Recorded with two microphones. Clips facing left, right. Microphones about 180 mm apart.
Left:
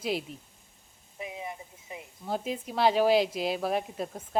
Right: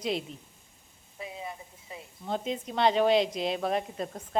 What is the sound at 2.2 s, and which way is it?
Speech, 5° left (ahead or behind).